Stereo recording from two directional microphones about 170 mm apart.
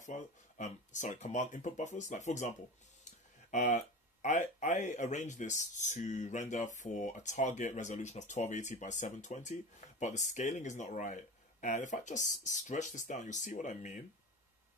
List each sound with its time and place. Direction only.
0.0 s speech: 45° left (ahead or behind)
3.5 s speech: 45° left (ahead or behind)